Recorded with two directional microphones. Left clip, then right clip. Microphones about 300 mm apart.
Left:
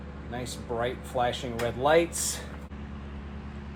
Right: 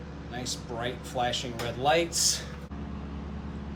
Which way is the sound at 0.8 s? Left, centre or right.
Centre.